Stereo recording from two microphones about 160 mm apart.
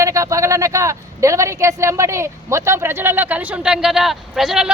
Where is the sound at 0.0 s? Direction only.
20° right (ahead or behind).